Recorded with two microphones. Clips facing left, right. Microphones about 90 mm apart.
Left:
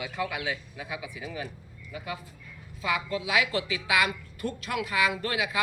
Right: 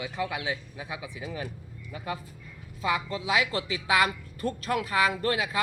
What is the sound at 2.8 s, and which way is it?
A woman's voice, 30° right (ahead or behind).